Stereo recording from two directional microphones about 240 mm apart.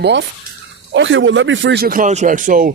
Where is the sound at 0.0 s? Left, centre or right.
Right.